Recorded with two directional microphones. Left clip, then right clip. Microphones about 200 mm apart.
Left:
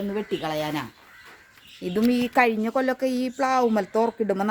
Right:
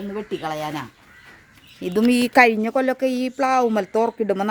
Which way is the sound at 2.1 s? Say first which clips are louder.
Right 6 dB; 55° right (ahead or behind).